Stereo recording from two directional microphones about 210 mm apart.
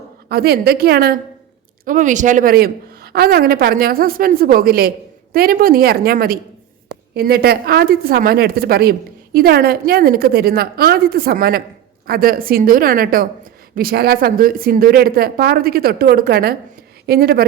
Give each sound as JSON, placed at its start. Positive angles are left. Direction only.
{"t": 0.3, "sound": "a woman's voice", "side_deg": -50}